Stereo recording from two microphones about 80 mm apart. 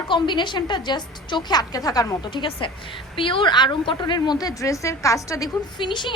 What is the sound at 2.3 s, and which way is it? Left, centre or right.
A woman's voice, left.